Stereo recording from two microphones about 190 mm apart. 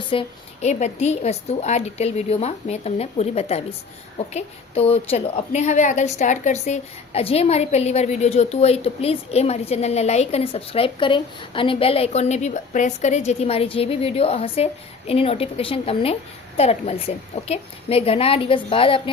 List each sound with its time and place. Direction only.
0.1 s a woman's voice: 30° left (ahead or behind)